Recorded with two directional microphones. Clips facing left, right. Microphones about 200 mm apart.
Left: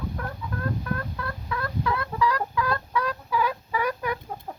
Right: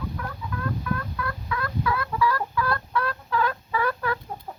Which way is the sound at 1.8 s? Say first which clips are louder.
Right 1 dB; 20° left (ahead or behind).